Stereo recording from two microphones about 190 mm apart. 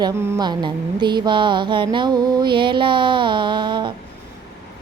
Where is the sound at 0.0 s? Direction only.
20° right (ahead or behind).